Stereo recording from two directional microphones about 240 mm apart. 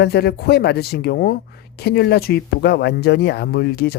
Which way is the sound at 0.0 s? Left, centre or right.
Left.